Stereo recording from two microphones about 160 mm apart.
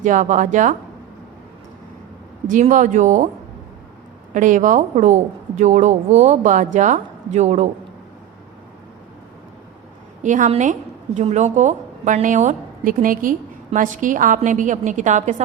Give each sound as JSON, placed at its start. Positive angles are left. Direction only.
{"t": 0.0, "sound": "a woman's voice", "side_deg": -50}
{"t": 2.5, "sound": "a woman's voice", "side_deg": -55}
{"t": 4.4, "sound": "a woman's voice", "side_deg": -50}
{"t": 10.2, "sound": "a woman's voice", "side_deg": -50}